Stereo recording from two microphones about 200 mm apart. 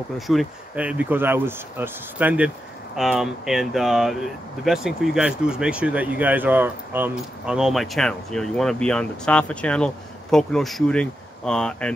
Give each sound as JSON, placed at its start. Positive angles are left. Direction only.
{"t": 0.3, "sound": "speech", "side_deg": -5}